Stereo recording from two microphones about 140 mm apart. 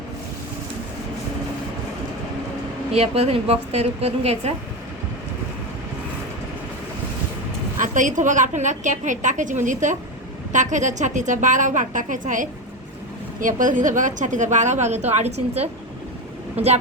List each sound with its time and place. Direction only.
2.9 s a woman's voice: 45° right (ahead or behind)
7.8 s a woman's voice: 65° right (ahead or behind); by 15.7 s 50° right (ahead or behind)
16.6 s a woman's voice: 10° right (ahead or behind)